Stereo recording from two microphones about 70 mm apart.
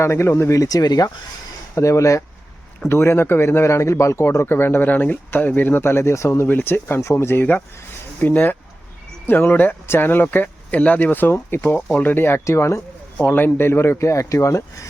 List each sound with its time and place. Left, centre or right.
0.0 s speech: left
1.7 s speech: left
2.9 s speech: left
13.2 s speech: left